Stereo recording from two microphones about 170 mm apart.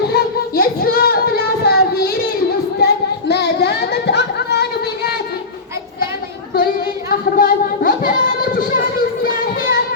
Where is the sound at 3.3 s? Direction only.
75° left (ahead or behind).